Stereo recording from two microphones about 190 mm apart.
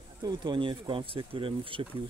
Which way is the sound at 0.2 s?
25° right (ahead or behind).